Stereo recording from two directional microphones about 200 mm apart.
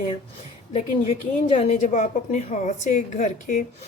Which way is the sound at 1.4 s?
35° left (ahead or behind).